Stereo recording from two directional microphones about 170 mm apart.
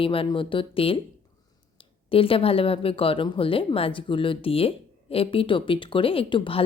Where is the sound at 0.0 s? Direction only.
30° left (ahead or behind).